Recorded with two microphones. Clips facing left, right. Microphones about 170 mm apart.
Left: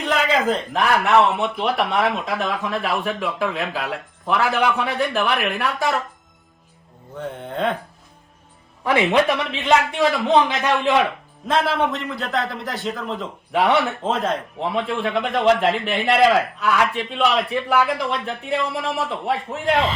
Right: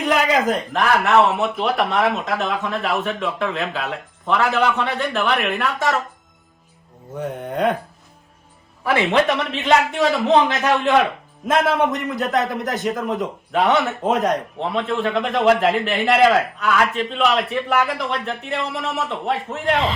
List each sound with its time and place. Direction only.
0.0 s a sound: 10° right (ahead or behind)
0.7 s a man's voice: centre (ahead or behind)
7.3 s a man's voice: 15° right (ahead or behind)
9.0 s a man's voice: centre (ahead or behind)
11.5 s a man's voice: 15° right (ahead or behind)
13.5 s a man's voice: centre (ahead or behind)
14.0 s a man's voice: 15° right (ahead or behind)
14.6 s a man's voice: centre (ahead or behind)